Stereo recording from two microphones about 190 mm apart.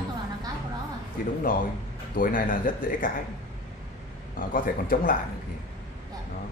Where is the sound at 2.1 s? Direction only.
45° left (ahead or behind).